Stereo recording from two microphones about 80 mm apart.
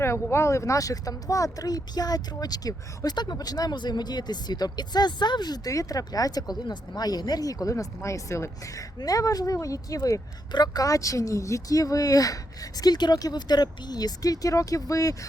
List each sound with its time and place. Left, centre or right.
0.0 s speech: left
10.5 s speech: left